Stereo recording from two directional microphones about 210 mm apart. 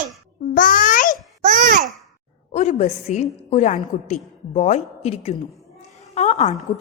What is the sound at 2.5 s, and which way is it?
A woman's voice, 35° left (ahead or behind).